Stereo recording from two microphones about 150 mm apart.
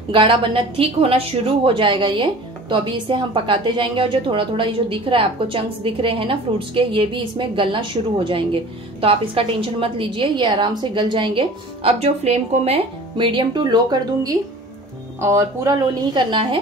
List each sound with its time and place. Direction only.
0.1 s a woman's voice: 35° right (ahead or behind); by 15.7 s 20° right (ahead or behind)
16.1 s a woman's voice: 30° right (ahead or behind)